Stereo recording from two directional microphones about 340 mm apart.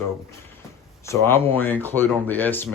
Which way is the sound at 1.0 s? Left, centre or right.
Centre.